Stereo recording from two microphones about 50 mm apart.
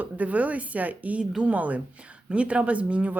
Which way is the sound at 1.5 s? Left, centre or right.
Right.